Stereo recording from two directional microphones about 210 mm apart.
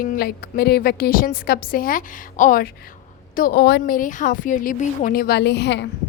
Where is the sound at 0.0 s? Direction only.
45° left (ahead or behind).